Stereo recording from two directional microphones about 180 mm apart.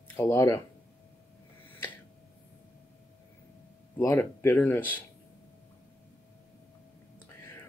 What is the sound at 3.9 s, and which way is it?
Speech, 15° left (ahead or behind).